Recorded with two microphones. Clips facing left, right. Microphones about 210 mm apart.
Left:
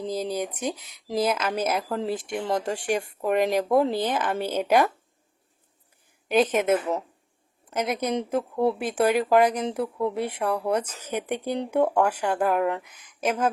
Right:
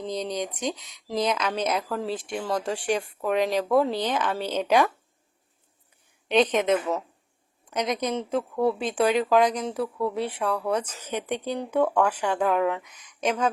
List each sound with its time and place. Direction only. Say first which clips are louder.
0.1 s speech: left 1 dB; 5° left (ahead or behind)
2.6 s speech: even; 10° left (ahead or behind)
6.2 s speech: even; 5° left (ahead or behind)